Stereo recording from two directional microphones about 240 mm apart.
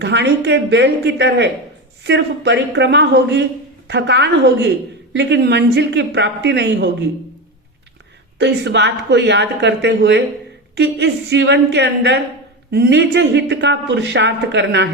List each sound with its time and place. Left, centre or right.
0.0 s speech: right
8.4 s speech: right